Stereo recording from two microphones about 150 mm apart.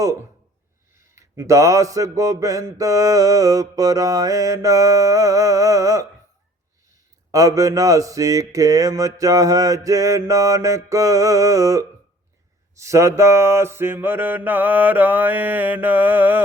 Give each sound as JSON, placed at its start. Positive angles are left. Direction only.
{"t": 0.0, "sound": "speech", "side_deg": -20}
{"t": 7.3, "sound": "speech", "side_deg": -20}
{"t": 12.7, "sound": "mantra", "side_deg": -20}